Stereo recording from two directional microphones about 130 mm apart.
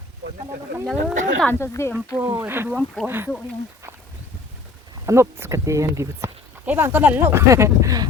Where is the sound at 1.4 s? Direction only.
20° left (ahead or behind).